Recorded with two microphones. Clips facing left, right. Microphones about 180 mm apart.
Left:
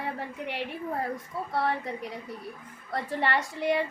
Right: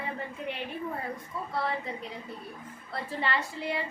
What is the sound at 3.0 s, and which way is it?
Speech, 65° left (ahead or behind).